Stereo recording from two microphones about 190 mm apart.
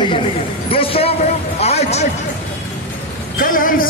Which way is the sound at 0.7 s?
30° left (ahead or behind).